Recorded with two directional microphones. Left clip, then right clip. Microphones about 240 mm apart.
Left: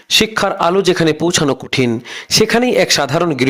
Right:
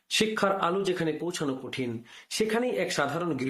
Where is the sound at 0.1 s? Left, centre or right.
Left.